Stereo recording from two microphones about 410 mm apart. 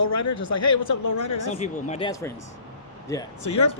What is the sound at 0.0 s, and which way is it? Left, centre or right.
Speech, left.